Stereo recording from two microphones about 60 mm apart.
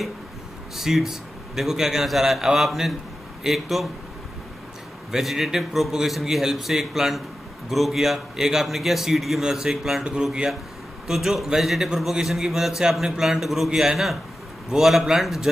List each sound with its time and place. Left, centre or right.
0.7 s a man's voice: centre
5.1 s a man's voice: centre